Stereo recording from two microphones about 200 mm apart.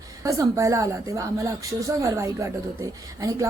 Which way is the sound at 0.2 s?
15° right (ahead or behind).